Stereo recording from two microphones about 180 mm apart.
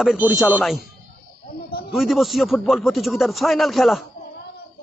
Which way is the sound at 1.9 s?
Centre (ahead or behind).